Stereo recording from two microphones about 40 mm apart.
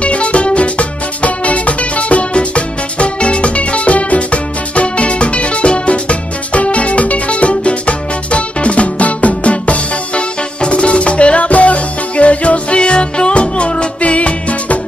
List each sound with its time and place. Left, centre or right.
0.0 s music: left